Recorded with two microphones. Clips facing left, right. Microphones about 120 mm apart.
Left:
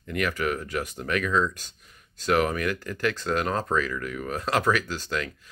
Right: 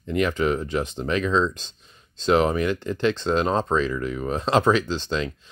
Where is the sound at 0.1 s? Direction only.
25° right (ahead or behind).